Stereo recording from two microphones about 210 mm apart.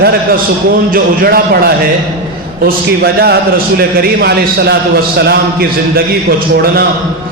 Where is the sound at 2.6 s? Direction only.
50° right (ahead or behind).